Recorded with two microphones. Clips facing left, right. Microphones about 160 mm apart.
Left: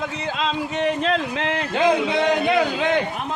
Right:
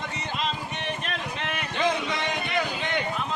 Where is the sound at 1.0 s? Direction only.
90° left.